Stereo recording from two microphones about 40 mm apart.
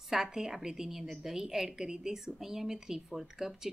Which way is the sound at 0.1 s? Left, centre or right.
Centre.